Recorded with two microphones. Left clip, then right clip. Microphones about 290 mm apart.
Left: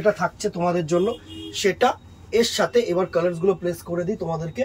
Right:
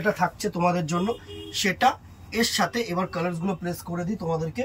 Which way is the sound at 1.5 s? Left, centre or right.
Centre.